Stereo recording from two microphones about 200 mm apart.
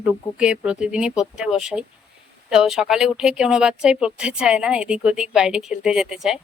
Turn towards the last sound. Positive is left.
turn(degrees=0)  # may be behind; listen again after turning